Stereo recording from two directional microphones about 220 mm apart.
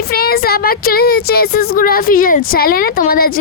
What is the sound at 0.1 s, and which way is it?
A woman's voice, 45° left (ahead or behind).